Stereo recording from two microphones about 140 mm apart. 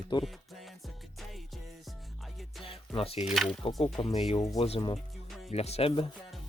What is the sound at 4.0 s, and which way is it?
Speech, 35° left (ahead or behind).